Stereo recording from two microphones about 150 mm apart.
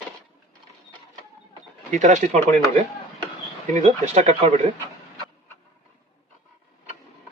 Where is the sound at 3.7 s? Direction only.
45° right (ahead or behind).